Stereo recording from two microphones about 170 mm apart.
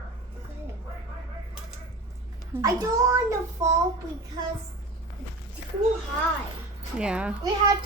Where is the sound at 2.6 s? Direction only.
20° right (ahead or behind).